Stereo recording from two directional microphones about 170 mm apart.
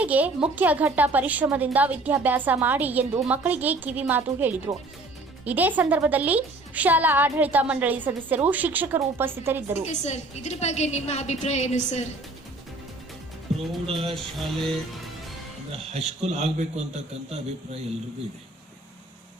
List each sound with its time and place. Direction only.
0.0 s speech: 10° right (ahead or behind)
9.9 s a woman's voice: 45° left (ahead or behind)
13.5 s music: 35° right (ahead or behind)
14.2 s music: centre (ahead or behind)
15.9 s a man's voice: 40° right (ahead or behind)